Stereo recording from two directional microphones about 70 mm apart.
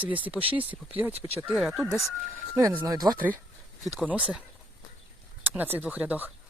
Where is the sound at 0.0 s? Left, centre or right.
Right.